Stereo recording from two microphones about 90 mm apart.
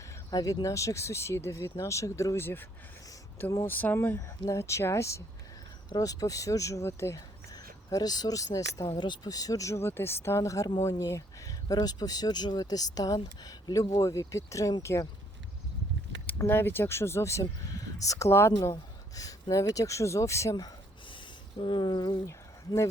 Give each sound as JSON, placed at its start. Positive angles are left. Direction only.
{"t": 0.3, "sound": "speech", "side_deg": 40}
{"t": 3.7, "sound": "speech", "side_deg": 20}
{"t": 4.4, "sound": "speech", "side_deg": 30}
{"t": 5.9, "sound": "speech", "side_deg": 45}
{"t": 16.5, "sound": "speech", "side_deg": 25}
{"t": 17.4, "sound": "speech", "side_deg": 40}
{"t": 21.6, "sound": "a sound", "side_deg": 60}
{"t": 22.3, "sound": "a sound", "side_deg": 35}